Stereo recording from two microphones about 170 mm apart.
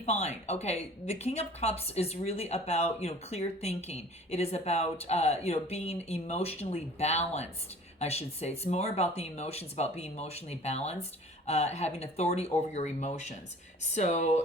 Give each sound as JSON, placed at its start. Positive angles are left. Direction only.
{"t": 0.0, "sound": "speech", "side_deg": 40}